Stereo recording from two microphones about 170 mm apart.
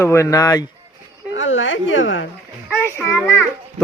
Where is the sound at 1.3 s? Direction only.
90° left.